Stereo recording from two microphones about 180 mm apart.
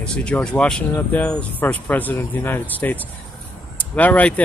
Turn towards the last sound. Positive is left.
turn(degrees=10)  # may be behind; listen again after turning